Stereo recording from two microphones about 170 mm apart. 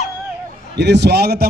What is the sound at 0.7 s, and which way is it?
Speech, 80° right.